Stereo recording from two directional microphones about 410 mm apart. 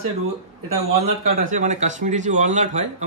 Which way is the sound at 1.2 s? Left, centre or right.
Centre.